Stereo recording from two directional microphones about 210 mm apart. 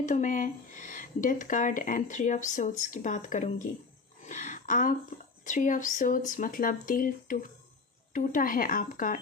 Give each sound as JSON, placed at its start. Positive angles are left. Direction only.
{"t": 0.0, "sound": "speech", "side_deg": 35}